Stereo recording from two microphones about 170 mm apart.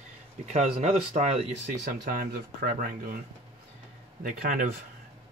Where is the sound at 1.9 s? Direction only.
55° right (ahead or behind).